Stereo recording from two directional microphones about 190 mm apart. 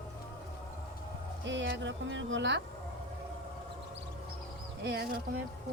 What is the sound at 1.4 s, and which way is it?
Speech, 70° right (ahead or behind).